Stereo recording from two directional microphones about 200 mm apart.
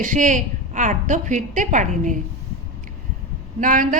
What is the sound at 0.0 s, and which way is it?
A woman's voice, 40° right (ahead or behind).